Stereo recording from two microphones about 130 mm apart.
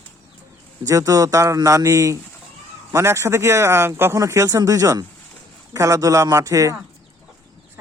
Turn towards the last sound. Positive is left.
turn(degrees=-25)  # may be behind; listen again after turning